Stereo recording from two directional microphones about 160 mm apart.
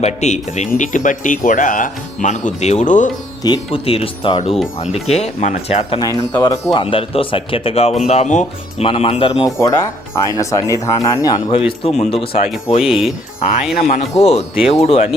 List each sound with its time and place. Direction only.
0.0 s speech: 45° left (ahead or behind)
3.4 s speech: 30° left (ahead or behind)
6.0 s speech: 25° left (ahead or behind); by 8.9 s 45° left (ahead or behind)
8.9 s speech: 35° left (ahead or behind)
9.6 s speech: 20° left (ahead or behind)
11.4 s speech: 35° left (ahead or behind)
12.8 s speech: 5° right (ahead or behind)
13.8 s speech: 40° left (ahead or behind)